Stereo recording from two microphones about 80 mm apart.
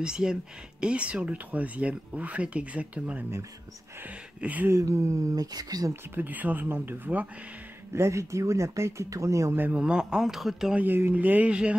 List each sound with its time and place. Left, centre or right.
0.0 s speech: centre
4.4 s speech: centre
4.7 s speech: right
5.3 s speech: right
6.1 s speech: right
7.9 s speech: right
9.6 s speech: centre
10.8 s speech: right